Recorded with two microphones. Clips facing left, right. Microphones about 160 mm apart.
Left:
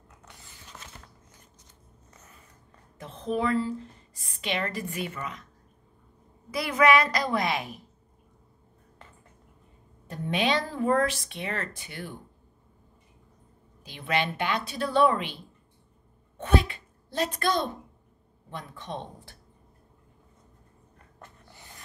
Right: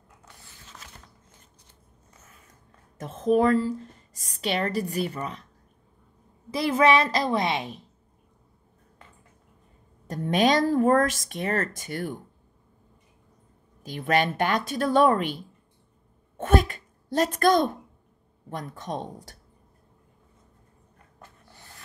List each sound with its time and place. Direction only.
3.0 s a woman's voice: 45° right (ahead or behind)
6.5 s a woman's voice: 30° right (ahead or behind)
10.0 s a woman's voice: 40° right (ahead or behind)
13.8 s a woman's voice: 45° right (ahead or behind)
21.5 s snort: 15° left (ahead or behind)